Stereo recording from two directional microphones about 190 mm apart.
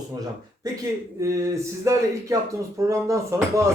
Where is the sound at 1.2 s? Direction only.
15° right (ahead or behind).